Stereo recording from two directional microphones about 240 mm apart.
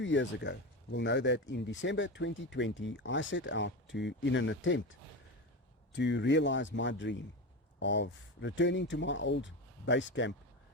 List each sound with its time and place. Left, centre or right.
0.0 s speech: left